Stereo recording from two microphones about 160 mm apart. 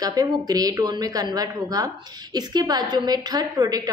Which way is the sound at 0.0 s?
20° right (ahead or behind).